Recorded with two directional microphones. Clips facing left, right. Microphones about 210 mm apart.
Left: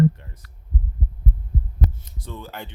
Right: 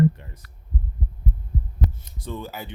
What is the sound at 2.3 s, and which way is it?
Speech, 10° right (ahead or behind).